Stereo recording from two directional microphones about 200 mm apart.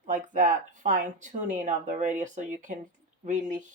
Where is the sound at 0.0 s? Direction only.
40° right (ahead or behind).